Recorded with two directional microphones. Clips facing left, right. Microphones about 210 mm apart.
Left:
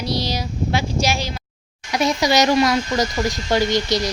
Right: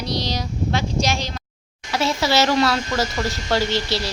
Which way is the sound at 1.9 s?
15° left (ahead or behind).